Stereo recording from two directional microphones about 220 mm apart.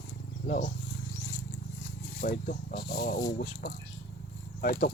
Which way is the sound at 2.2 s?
40° left (ahead or behind).